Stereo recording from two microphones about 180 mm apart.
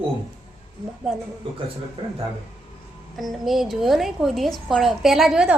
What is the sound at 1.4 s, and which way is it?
Speech, 30° right (ahead or behind).